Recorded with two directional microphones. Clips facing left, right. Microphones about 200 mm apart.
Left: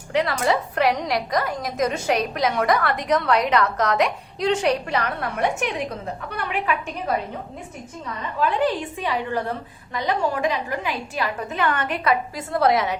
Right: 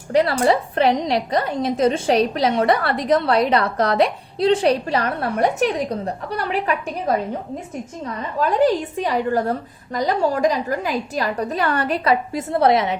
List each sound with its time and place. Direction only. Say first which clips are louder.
0.1 s a woman's voice: right 5 dB; 35° right (ahead or behind)
8.4 s a woman's voice: right 4 dB; 40° right (ahead or behind); by 13.0 s 25° right (ahead or behind)